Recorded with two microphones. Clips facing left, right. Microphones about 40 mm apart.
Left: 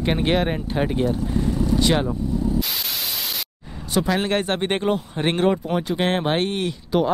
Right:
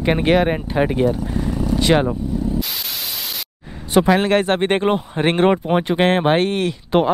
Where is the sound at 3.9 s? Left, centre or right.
Right.